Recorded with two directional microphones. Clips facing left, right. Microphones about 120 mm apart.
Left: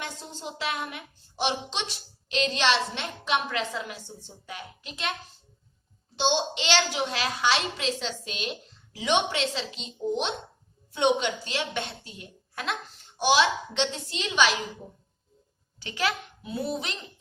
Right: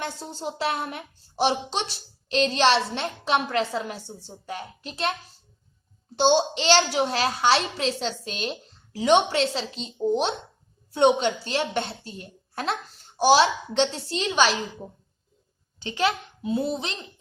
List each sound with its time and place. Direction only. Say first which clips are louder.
0.0 s a child's voice: right 5 dB; 35° right (ahead or behind)
6.1 s a child's voice: right 6 dB; 40° right (ahead or behind)
15.8 s a child's voice: right 4 dB; 25° right (ahead or behind)